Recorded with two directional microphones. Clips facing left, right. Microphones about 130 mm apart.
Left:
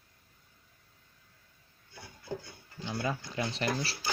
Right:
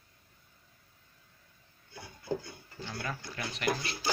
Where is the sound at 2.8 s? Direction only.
20° left (ahead or behind).